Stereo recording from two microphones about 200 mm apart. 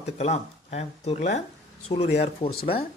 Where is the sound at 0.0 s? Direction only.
35° left (ahead or behind).